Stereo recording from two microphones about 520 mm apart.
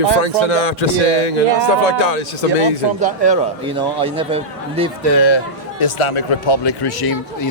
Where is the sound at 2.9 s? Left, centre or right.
Centre.